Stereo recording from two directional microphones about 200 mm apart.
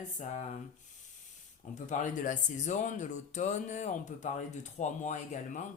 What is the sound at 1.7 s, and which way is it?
Speech, 35° left (ahead or behind).